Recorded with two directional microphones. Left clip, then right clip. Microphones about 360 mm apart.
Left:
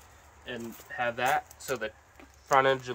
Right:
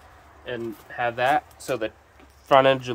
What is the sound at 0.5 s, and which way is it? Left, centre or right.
Speech, centre.